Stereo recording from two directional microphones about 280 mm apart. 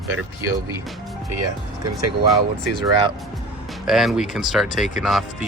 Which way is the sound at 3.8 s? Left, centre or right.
Centre.